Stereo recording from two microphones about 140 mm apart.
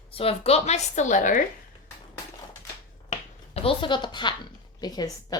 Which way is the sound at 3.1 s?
45° left (ahead or behind).